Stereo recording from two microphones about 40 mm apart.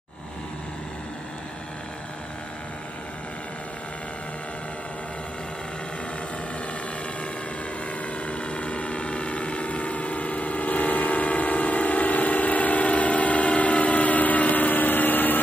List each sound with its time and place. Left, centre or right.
8.3 s vehicle: left